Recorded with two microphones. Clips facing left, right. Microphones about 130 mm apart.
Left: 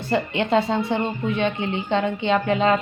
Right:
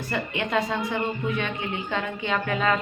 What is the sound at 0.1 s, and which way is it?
A woman's voice, 30° left (ahead or behind).